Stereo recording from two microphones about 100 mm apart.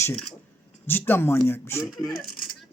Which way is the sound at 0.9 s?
20° left (ahead or behind).